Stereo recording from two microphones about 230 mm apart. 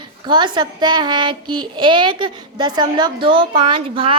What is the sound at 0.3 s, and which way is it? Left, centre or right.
A woman's voice, centre.